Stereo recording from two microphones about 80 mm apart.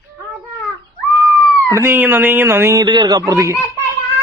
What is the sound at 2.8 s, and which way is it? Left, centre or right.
Speech, right.